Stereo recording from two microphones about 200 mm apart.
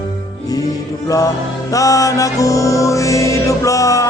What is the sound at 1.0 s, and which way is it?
Music, 15° left (ahead or behind).